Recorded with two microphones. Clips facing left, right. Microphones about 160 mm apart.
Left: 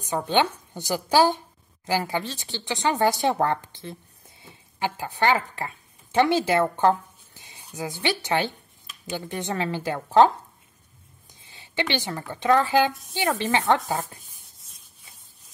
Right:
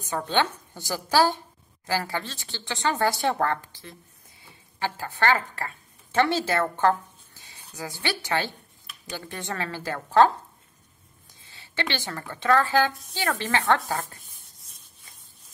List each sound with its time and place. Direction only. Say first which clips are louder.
0.0 s speech: left 3 dB; 15° left (ahead or behind)
11.4 s speech: left 3 dB; 15° left (ahead or behind)